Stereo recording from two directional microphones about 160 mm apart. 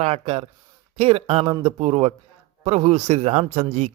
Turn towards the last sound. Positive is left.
turn(degrees=-45)  # may be behind; listen again after turning